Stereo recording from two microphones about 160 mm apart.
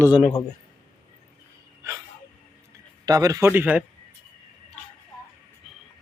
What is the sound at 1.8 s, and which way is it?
Speech, 20° right (ahead or behind).